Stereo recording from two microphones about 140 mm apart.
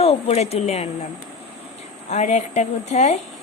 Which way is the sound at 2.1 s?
55° left (ahead or behind).